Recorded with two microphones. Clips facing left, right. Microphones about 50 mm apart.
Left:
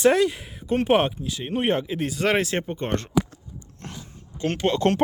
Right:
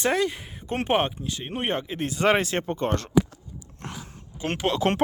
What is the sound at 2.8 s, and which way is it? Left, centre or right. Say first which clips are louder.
Speech: right 1 dB; left.